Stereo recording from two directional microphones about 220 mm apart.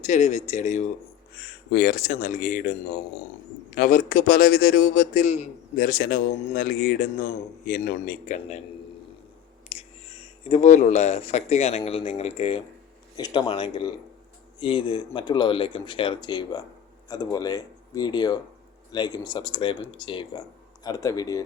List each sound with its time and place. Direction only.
0.0 s a man's voice: 30° left (ahead or behind)
1.7 s a man's voice: 45° left (ahead or behind)
3.8 s a man's voice: 40° left (ahead or behind)
9.6 s speech: 25° left (ahead or behind)